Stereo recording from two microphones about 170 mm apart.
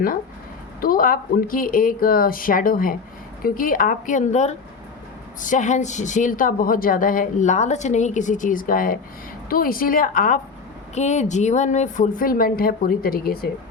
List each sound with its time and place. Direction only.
0.8 s a woman's voice: 55° left (ahead or behind)